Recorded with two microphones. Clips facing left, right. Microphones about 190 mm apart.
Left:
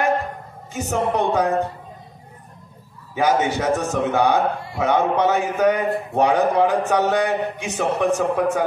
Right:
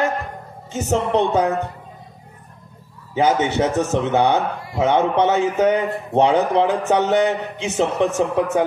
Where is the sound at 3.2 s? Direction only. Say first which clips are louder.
Right 2 dB; 25° right (ahead or behind).